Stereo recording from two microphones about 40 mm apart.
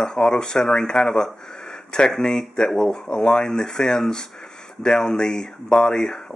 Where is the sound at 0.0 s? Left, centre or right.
Centre.